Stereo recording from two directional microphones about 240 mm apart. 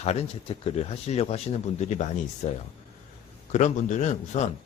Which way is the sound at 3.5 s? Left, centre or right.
Left.